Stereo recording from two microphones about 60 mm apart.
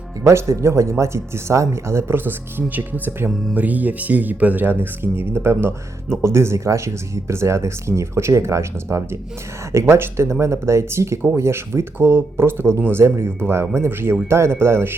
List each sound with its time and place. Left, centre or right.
0.3 s speech: right